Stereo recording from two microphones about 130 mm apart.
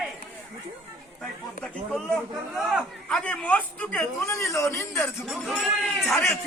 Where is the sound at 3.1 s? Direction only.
10° left (ahead or behind).